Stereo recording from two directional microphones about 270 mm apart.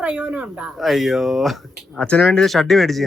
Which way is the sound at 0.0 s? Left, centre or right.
Centre.